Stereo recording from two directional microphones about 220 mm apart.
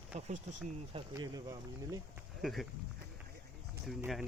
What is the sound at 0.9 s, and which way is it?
Speech, 20° right (ahead or behind).